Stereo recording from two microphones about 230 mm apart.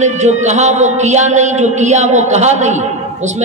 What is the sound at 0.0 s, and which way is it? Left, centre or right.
A man's voice, right.